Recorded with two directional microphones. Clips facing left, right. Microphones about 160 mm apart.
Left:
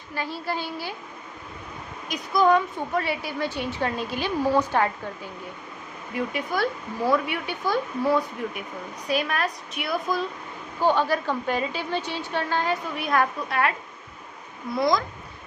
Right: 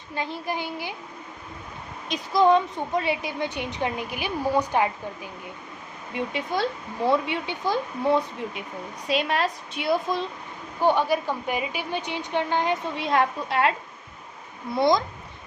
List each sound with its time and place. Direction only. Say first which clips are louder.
0.1 s a woman's voice: even; 20° right (ahead or behind)
2.0 s a woman's voice: right 1 dB; 25° right (ahead or behind)
10.8 s a woman's voice: right 1 dB; 15° right (ahead or behind)